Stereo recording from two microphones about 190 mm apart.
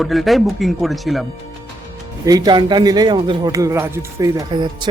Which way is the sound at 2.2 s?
20° right (ahead or behind).